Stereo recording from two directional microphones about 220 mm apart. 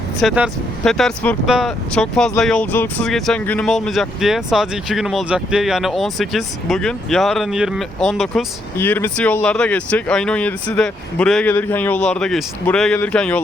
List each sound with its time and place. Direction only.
0.2 s speech: centre (ahead or behind)
8.8 s speech: 10° left (ahead or behind)